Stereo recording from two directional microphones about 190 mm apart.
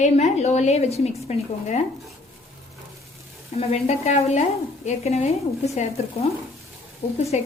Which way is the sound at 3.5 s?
35° left (ahead or behind).